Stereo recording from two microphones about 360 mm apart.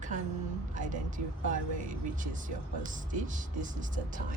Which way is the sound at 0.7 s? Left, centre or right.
Right.